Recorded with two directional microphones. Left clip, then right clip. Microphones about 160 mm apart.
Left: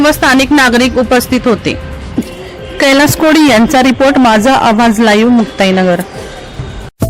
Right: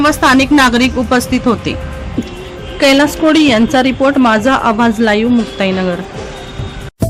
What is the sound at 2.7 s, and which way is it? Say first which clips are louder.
A woman's voice: left 2 dB; 45° left (ahead or behind).